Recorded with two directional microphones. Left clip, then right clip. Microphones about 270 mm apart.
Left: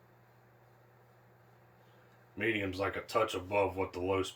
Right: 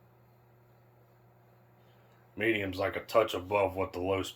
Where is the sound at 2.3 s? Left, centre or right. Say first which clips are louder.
Right 3 dB; centre.